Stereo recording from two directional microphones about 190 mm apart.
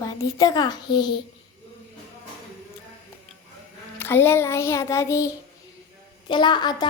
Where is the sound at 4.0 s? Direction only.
10° left (ahead or behind).